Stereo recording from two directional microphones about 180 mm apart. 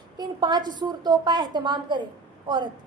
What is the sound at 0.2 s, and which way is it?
A woman's voice, 25° right (ahead or behind).